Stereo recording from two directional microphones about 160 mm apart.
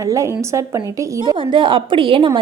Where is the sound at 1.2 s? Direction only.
30° right (ahead or behind).